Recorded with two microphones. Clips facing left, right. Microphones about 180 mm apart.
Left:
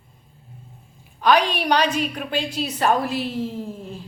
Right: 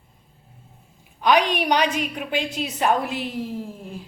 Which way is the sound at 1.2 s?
15° right (ahead or behind).